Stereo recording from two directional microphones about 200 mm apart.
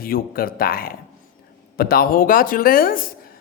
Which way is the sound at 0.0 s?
45° left (ahead or behind).